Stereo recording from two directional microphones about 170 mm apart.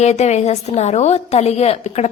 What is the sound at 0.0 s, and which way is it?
A woman's voice, 40° left (ahead or behind).